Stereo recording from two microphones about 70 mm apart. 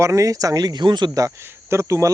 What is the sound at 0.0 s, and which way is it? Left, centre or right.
Speech, right.